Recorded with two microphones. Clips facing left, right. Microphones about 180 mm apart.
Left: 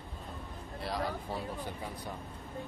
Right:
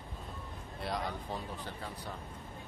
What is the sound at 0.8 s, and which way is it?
Speech, centre (ahead or behind).